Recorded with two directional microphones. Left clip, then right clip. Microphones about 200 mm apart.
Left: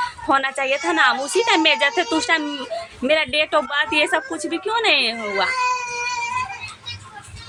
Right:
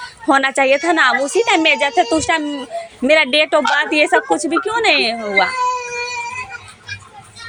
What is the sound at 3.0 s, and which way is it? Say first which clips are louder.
A woman's voice: right 6 dB; 30° right (ahead or behind).